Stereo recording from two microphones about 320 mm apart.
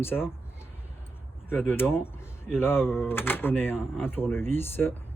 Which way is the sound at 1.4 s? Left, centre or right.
Centre.